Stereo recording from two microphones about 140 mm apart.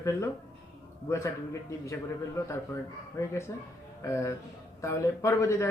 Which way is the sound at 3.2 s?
25° left (ahead or behind).